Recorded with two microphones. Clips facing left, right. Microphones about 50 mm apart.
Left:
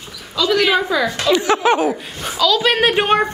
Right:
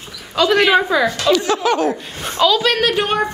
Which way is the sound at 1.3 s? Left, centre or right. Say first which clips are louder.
Left 4 dB; left.